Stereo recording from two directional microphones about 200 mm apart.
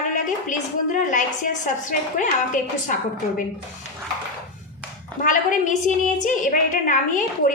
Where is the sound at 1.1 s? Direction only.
40° left (ahead or behind).